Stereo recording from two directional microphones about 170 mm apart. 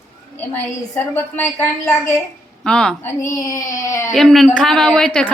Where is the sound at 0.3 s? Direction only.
10° left (ahead or behind).